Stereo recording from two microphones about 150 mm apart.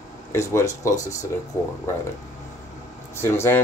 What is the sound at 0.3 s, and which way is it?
Speech, 20° left (ahead or behind).